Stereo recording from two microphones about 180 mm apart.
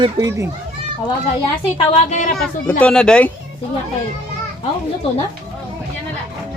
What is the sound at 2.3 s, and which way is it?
Speech, 5° left (ahead or behind).